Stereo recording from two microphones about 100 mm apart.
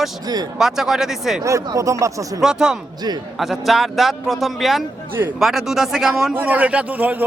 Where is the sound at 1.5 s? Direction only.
30° right (ahead or behind).